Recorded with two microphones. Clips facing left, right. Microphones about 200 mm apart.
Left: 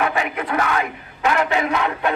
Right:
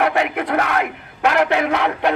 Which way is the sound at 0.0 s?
70° right (ahead or behind).